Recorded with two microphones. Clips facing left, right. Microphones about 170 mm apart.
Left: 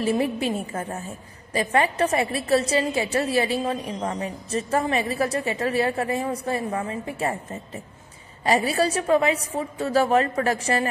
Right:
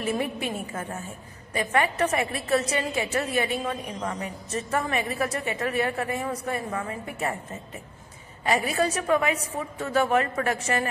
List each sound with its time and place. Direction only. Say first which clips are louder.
0.0 s a woman's voice: left 5 dB; 30° left (ahead or behind)
8.5 s a woman's voice: left 3 dB; 35° left (ahead or behind)